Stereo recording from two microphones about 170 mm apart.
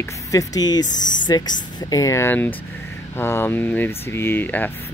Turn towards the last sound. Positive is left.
turn(degrees=10)  # may be behind; listen again after turning